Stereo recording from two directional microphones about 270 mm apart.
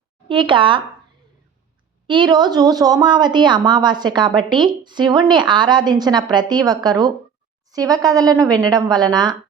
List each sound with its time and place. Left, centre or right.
0.3 s speech: centre
2.0 s a woman's voice: centre